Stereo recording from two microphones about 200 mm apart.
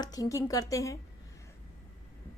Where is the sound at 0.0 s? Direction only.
20° left (ahead or behind).